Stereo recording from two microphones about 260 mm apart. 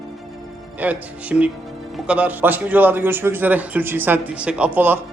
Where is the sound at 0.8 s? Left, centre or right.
Centre.